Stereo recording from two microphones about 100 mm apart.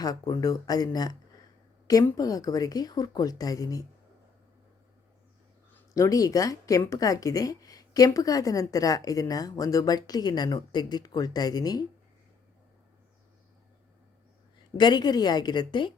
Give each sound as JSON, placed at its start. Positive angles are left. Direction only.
{"t": 0.0, "sound": "speech", "side_deg": 40}
{"t": 2.1, "sound": "speech", "side_deg": 40}
{"t": 5.9, "sound": "speech", "side_deg": 35}
{"t": 14.8, "sound": "a woman's voice", "side_deg": 45}